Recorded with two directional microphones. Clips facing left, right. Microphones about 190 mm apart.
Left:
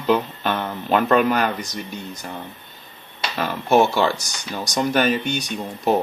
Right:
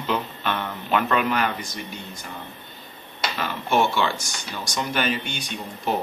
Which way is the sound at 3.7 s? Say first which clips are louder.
Left 5 dB; 40° left (ahead or behind).